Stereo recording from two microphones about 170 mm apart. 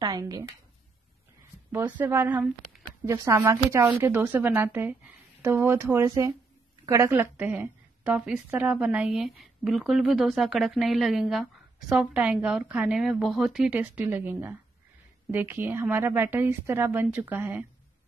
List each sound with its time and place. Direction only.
0.0 s speech: 20° right (ahead or behind)
1.7 s a woman's voice: 10° right (ahead or behind)